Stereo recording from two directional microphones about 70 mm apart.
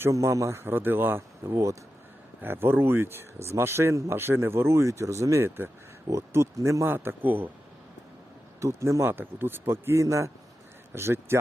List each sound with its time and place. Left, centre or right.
0.1 s speech: right
6.9 s a man's voice: right
8.6 s speech: right
10.9 s speech: right